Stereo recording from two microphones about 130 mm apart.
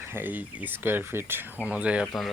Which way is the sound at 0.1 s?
15° right (ahead or behind).